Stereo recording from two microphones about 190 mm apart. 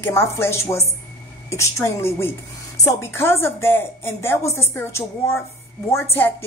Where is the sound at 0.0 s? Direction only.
15° left (ahead or behind).